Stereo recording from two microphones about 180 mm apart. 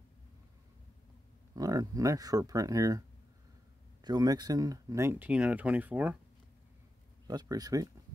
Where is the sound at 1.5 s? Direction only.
20° right (ahead or behind).